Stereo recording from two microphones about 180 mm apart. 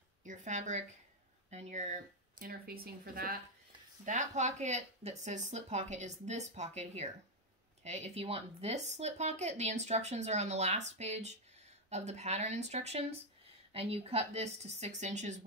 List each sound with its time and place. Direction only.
0.2 s speech: 45° right (ahead or behind)
4.0 s speech: 45° right (ahead or behind)